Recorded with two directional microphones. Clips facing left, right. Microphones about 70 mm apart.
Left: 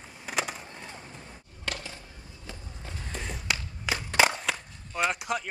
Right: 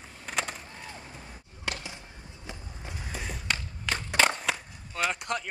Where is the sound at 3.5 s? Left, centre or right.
Centre.